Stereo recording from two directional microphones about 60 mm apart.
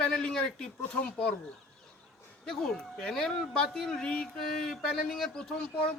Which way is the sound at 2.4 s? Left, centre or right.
Centre.